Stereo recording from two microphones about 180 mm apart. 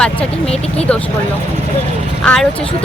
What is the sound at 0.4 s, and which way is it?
Speech, 35° left (ahead or behind).